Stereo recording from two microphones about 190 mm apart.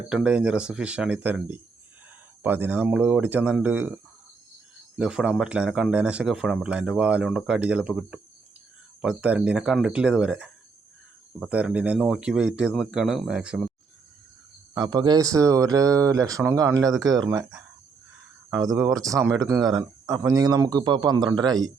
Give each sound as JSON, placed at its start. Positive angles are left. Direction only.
{"t": 0.1, "sound": "speech", "side_deg": -5}
{"t": 14.9, "sound": "speech", "side_deg": -20}